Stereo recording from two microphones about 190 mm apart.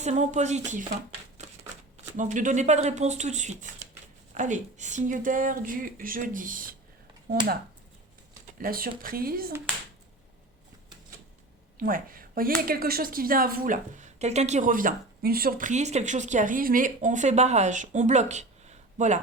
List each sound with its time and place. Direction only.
0.0 s speech: 35° right (ahead or behind)
1.4 s shuffling cards: 35° right (ahead or behind)
2.1 s speech: 40° right (ahead or behind)
8.5 s speech: 50° right (ahead or behind)
11.8 s speech: 45° right (ahead or behind)